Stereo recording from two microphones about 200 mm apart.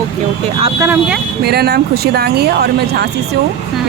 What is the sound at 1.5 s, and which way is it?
A woman's voice, 50° right (ahead or behind).